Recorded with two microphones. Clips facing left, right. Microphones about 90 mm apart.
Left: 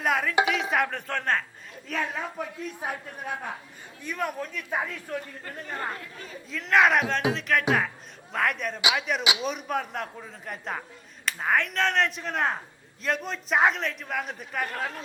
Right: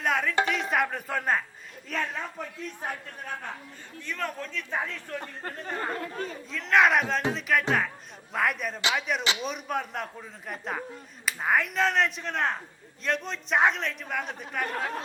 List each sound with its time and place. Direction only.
0.0 s a man's voice: 5° left (ahead or behind)
1.9 s a man's voice: 5° left (ahead or behind)
5.2 s speech: 45° right (ahead or behind)
6.5 s a man's voice: centre (ahead or behind)